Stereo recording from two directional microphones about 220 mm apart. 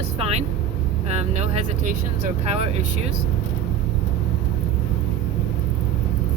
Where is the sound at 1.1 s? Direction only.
30° right (ahead or behind).